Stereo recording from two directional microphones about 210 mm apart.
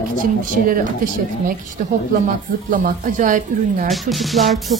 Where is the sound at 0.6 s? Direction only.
40° right (ahead or behind).